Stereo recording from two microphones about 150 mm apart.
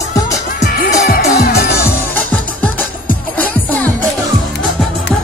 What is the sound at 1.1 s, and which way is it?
Music, 90° left.